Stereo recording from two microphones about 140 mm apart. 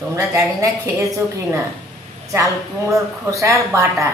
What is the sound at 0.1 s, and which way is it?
Speech, 20° right (ahead or behind).